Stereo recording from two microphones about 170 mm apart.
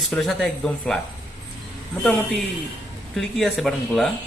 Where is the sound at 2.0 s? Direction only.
5° left (ahead or behind).